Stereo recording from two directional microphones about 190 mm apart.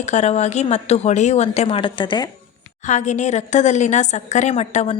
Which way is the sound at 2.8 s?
40° left (ahead or behind).